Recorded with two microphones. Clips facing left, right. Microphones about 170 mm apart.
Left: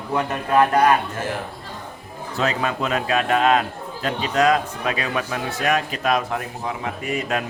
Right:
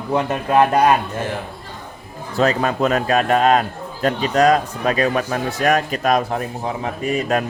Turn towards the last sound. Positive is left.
turn(degrees=-35)  # may be behind; listen again after turning